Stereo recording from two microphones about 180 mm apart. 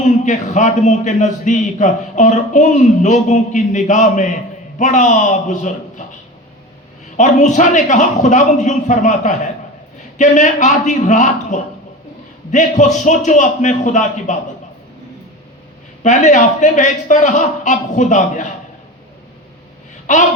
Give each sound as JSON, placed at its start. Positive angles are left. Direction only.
{"t": 0.3, "sound": "a man's voice", "side_deg": 40}
{"t": 7.2, "sound": "a man's voice", "side_deg": 40}
{"t": 16.0, "sound": "a man's voice", "side_deg": 40}